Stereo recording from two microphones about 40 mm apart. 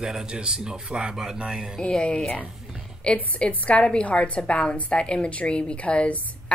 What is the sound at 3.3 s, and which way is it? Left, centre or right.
A woman's voice, left.